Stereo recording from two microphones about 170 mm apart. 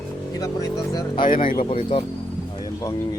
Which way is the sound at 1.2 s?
50° left (ahead or behind).